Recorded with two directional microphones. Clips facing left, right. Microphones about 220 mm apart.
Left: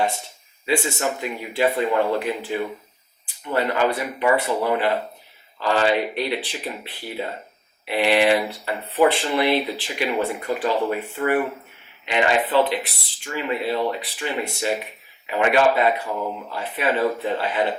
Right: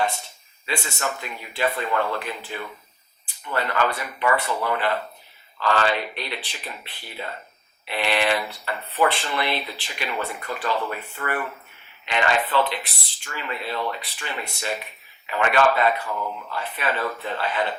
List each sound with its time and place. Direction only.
0.8 s speech: 15° left (ahead or behind)
16.0 s speech: 25° left (ahead or behind)
16.5 s speech: 10° left (ahead or behind)